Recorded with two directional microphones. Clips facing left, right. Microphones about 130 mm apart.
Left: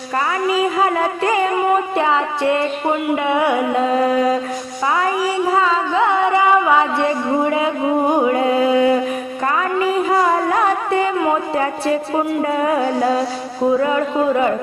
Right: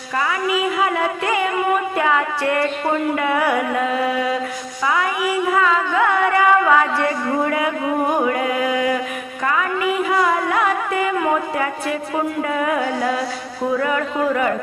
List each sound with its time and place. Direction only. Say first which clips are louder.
0.4 s music: left 4 dB; 35° left (ahead or behind)
3.9 s music: left 5 dB; 40° left (ahead or behind)
4.9 s carnatic music: left 2 dB; 30° left (ahead or behind)
9.6 s music: left 3 dB; 30° left (ahead or behind)
13.7 s a man's voice: even; 25° left (ahead or behind)